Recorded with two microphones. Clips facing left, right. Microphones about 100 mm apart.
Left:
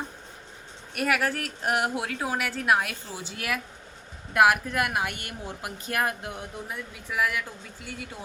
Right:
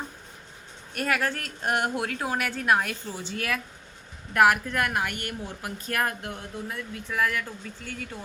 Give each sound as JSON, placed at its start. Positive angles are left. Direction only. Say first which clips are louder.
{"t": 0.9, "sound": "speech", "louder": "left 1 dB", "side_deg": 5}